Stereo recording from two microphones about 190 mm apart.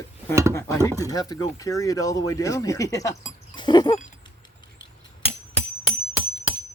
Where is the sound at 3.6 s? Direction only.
25° left (ahead or behind).